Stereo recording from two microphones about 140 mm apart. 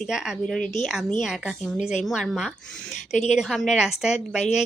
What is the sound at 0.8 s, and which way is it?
A woman's voice, 5° right (ahead or behind).